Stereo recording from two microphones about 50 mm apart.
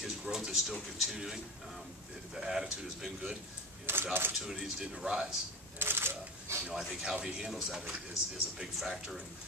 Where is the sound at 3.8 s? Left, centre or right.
Right.